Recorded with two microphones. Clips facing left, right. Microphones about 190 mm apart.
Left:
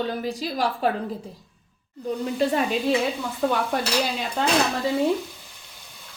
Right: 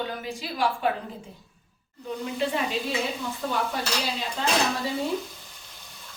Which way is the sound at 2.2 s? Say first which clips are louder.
Left 5 dB; 40° left (ahead or behind).